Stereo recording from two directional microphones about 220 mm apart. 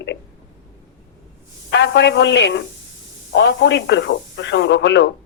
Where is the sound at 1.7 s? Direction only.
50° left (ahead or behind).